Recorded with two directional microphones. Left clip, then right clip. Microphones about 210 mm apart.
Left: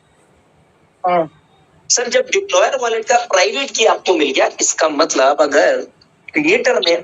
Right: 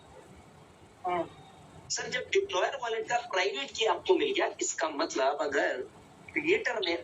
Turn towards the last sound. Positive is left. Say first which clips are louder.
# left 16 dB
turn(degrees=45)  # may be behind; listen again after turning